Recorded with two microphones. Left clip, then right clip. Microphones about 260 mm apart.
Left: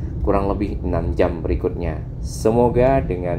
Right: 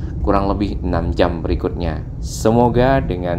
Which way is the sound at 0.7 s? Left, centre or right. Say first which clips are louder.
Right 2 dB; right.